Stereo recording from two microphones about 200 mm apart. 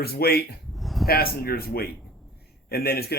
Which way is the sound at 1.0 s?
50° left (ahead or behind).